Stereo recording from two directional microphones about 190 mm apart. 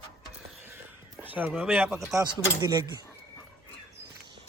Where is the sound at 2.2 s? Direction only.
20° right (ahead or behind).